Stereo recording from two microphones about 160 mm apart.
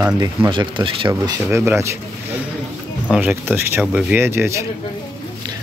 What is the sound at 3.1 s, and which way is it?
Speech, 10° right (ahead or behind).